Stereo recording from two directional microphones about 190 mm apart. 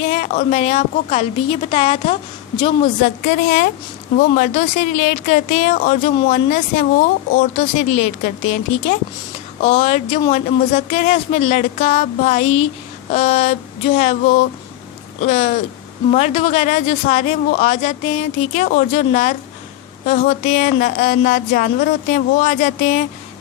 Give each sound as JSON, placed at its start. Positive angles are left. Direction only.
{"t": 0.0, "sound": "speech", "side_deg": 40}
{"t": 3.0, "sound": "a woman's voice", "side_deg": 50}